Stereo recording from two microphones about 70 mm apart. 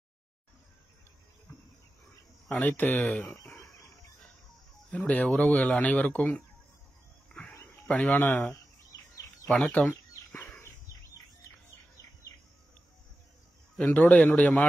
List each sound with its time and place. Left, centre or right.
2.4 s speech: left
3.0 s speech: centre
4.9 s speech: centre
7.3 s a sound: centre
7.9 s speech: left
9.5 s bird: centre
13.8 s speech: left